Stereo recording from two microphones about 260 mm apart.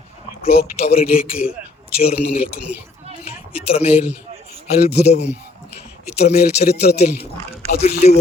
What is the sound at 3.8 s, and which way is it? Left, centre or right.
Speech, left.